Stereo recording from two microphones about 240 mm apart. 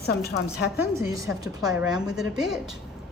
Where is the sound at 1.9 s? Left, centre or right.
Centre.